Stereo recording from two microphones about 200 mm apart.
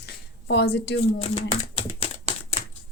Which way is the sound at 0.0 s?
55° left (ahead or behind).